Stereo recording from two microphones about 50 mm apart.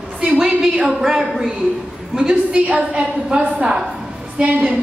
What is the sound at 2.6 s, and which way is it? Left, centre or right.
A woman's voice, right.